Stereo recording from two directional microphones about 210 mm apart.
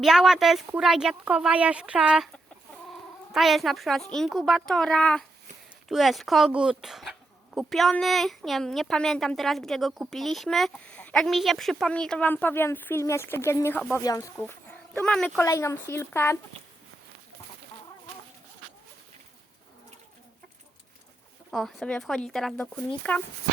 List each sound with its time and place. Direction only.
0.0 s speech: centre (ahead or behind)
15.4 s speech: 15° left (ahead or behind)
21.5 s speech: centre (ahead or behind)